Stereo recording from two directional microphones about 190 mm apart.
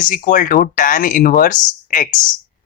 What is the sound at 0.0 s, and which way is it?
Speech, 45° left (ahead or behind).